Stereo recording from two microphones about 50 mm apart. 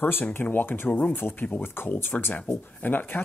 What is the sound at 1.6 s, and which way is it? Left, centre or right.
Speech, left.